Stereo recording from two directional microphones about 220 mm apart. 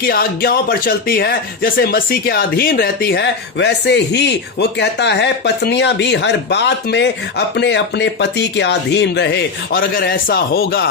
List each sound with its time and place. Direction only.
0.0 s speech: 45° left (ahead or behind)